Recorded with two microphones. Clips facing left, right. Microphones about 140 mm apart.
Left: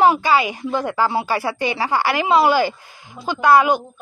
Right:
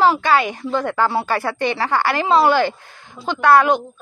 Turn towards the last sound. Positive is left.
turn(degrees=5)  # may be behind; listen again after turning